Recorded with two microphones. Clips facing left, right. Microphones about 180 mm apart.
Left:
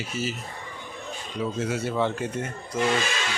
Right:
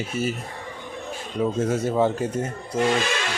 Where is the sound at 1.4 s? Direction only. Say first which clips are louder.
Right 5 dB; 50° right (ahead or behind).